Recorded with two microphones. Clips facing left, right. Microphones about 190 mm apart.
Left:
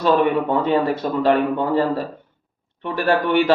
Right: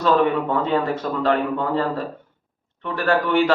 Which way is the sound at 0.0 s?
20° left (ahead or behind).